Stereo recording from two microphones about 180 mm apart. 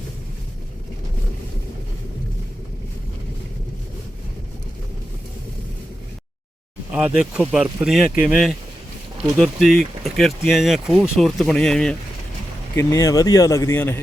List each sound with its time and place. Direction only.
6.9 s speech: 5° right (ahead or behind)
12.7 s speech: 15° left (ahead or behind)